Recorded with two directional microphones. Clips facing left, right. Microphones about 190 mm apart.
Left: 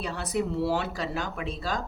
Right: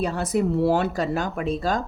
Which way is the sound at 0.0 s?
45° right (ahead or behind).